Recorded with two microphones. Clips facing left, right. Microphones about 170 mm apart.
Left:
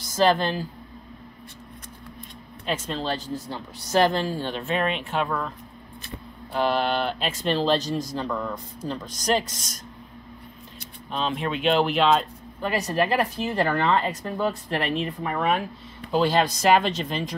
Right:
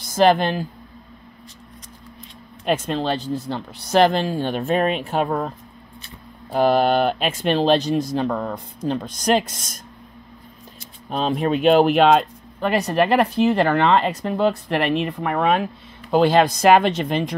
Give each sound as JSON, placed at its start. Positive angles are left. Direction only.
{"t": 0.1, "sound": "speech", "side_deg": -60}
{"t": 2.6, "sound": "speech", "side_deg": -60}
{"t": 6.5, "sound": "speech", "side_deg": -45}
{"t": 11.1, "sound": "speech", "side_deg": -45}
{"t": 16.1, "sound": "speech", "side_deg": -60}